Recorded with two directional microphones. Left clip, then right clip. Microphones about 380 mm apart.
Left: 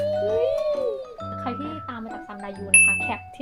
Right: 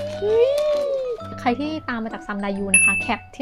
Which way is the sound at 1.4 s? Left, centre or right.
Right.